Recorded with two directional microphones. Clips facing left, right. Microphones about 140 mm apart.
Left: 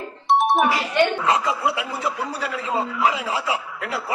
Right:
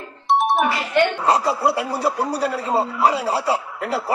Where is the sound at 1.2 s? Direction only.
35° right (ahead or behind).